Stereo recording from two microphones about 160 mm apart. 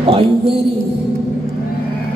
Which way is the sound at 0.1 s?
35° right (ahead or behind).